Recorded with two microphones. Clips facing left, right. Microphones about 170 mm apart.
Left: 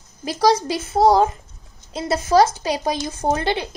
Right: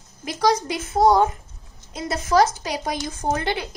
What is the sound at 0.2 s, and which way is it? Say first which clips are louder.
Speech: left 3 dB; 35° left (ahead or behind).